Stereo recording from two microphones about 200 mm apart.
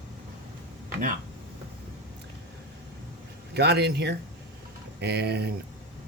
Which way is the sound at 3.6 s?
55° right (ahead or behind).